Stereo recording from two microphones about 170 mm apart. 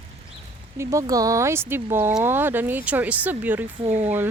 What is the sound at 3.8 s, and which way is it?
Speech, 40° right (ahead or behind).